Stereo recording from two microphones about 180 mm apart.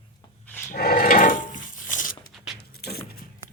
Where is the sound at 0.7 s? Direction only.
55° left (ahead or behind).